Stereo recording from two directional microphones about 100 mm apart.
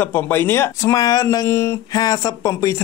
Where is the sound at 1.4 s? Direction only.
25° left (ahead or behind).